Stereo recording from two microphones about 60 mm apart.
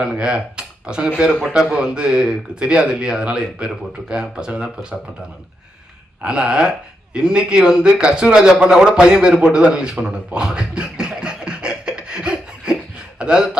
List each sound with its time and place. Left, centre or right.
0.0 s speech: centre
6.2 s a man's voice: centre
9.9 s scratching: centre
13.1 s a sound: centre